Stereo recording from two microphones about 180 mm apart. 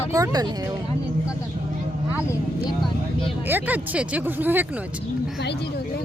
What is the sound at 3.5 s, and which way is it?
Speech, 10° right (ahead or behind).